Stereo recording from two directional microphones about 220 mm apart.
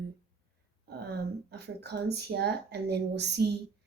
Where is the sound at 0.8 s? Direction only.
45° right (ahead or behind).